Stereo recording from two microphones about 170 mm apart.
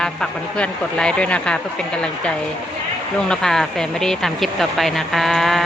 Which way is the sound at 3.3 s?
Centre (ahead or behind).